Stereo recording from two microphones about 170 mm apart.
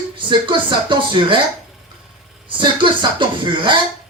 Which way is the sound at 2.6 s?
30° right (ahead or behind).